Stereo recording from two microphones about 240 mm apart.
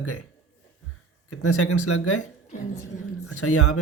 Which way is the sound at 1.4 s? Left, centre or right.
Left.